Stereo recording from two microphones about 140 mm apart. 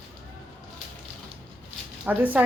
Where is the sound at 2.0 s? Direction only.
10° right (ahead or behind).